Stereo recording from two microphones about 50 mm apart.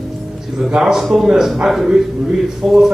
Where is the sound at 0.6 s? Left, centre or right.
Centre.